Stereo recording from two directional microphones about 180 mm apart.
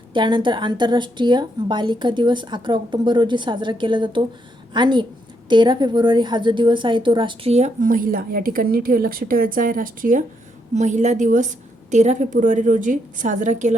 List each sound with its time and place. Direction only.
0.1 s a woman's voice: 25° right (ahead or behind); by 13.7 s 45° right (ahead or behind)